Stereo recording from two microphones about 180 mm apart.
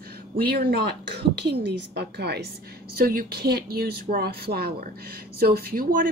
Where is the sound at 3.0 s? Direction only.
55° right (ahead or behind).